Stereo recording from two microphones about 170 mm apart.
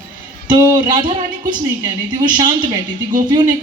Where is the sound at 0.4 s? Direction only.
25° right (ahead or behind).